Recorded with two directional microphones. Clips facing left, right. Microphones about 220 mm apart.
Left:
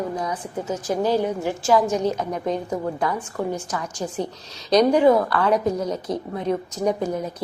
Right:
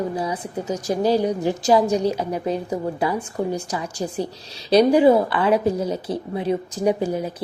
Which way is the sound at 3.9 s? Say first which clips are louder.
Right 2 dB; 35° right (ahead or behind).